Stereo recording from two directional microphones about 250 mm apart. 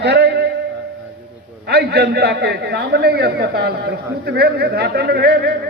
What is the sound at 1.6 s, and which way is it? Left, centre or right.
A man's voice, right.